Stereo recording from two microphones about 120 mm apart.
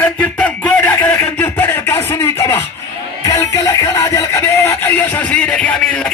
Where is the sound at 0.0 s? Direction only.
15° left (ahead or behind).